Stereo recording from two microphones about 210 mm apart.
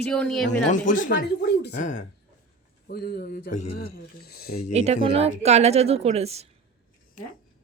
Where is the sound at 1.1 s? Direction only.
50° left (ahead or behind).